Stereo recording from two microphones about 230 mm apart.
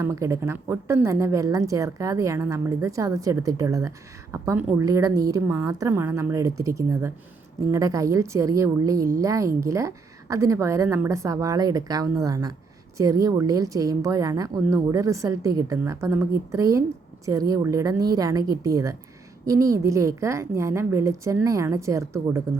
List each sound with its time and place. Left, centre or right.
0.0 s a woman's voice: centre